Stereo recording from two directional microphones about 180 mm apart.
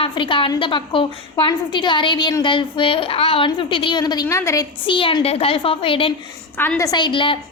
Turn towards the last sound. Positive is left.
turn(degrees=30)  # may be behind; listen again after turning